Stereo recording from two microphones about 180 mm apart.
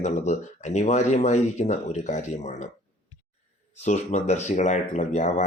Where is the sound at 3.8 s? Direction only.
40° left (ahead or behind).